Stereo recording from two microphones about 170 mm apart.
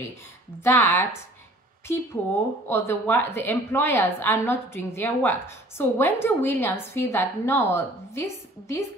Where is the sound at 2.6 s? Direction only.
15° left (ahead or behind).